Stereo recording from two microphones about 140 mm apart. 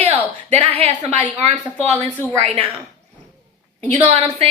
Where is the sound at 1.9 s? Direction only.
15° left (ahead or behind).